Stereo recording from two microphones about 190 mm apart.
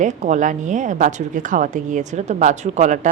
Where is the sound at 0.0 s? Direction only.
40° right (ahead or behind).